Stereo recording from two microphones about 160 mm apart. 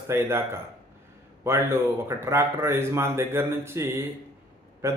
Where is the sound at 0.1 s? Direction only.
15° right (ahead or behind).